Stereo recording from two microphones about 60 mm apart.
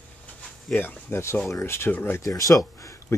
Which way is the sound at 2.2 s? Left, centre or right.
Left.